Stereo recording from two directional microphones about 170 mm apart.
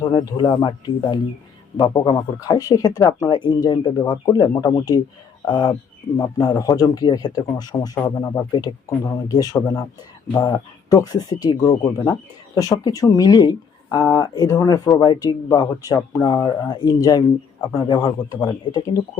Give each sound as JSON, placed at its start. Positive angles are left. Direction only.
{"t": 0.0, "sound": "a man's voice", "side_deg": 25}